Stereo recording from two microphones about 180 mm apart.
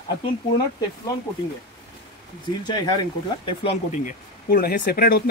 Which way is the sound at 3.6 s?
40° left (ahead or behind).